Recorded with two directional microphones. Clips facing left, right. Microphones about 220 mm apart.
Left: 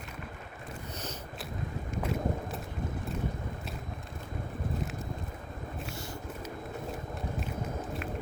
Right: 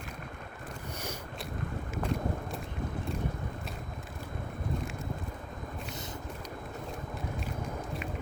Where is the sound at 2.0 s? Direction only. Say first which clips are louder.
Left 1 dB; 5° left (ahead or behind).